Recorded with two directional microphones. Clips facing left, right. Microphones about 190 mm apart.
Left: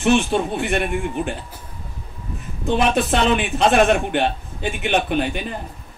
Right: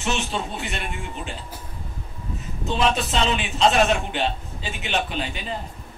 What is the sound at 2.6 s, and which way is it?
A man's voice, 60° left (ahead or behind).